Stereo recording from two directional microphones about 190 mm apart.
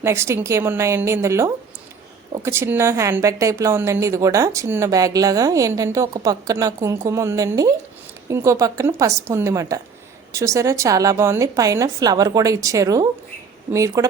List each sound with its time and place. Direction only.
0.0 s a woman's voice: 15° right (ahead or behind)